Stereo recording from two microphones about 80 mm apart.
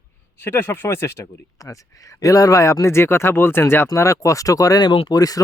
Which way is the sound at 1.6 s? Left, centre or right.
Left.